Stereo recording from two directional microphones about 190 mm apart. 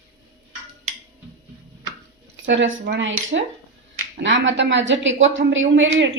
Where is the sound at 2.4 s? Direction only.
75° right (ahead or behind).